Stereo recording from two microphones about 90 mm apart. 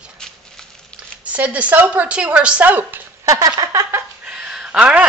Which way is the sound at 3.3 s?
40° right (ahead or behind).